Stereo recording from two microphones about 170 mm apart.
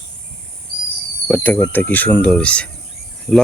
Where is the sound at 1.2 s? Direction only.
10° left (ahead or behind).